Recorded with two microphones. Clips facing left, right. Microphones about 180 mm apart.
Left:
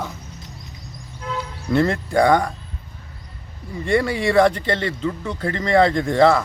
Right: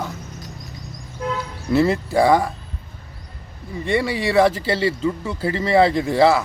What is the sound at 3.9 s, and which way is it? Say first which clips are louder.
Speech: left 2 dB; centre (ahead or behind).